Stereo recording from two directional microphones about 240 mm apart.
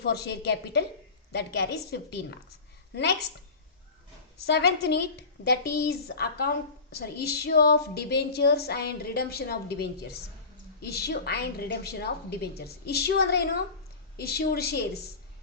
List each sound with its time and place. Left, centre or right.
0.0 s a woman's voice: left
4.4 s a woman's voice: left